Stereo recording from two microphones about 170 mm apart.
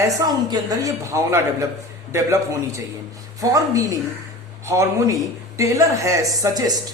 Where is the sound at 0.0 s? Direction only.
20° right (ahead or behind).